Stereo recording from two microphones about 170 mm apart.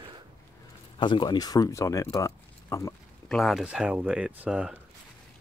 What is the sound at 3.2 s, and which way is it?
Speech, centre (ahead or behind).